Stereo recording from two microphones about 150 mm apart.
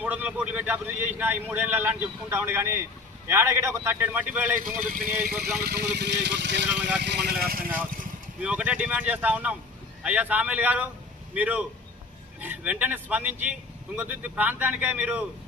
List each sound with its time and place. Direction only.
0.0 s a man's voice: 10° right (ahead or behind)
4.6 s speech: 65° right (ahead or behind); by 6.1 s 90° right
7.2 s speech: 90° right; by 8.0 s 70° right (ahead or behind)
8.4 s a man's voice: 10° right (ahead or behind)